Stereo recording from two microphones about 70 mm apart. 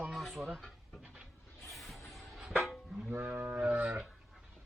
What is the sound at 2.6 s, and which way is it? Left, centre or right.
Music, centre.